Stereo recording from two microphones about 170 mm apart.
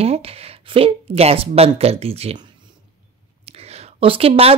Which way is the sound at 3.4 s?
35° right (ahead or behind).